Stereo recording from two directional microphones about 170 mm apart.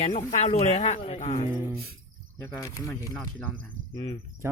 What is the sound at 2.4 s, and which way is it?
Speech, 15° left (ahead or behind).